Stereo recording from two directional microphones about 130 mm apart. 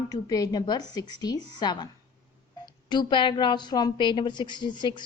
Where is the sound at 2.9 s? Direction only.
35° left (ahead or behind).